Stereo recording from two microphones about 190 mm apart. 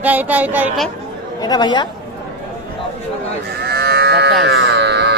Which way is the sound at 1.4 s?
20° left (ahead or behind).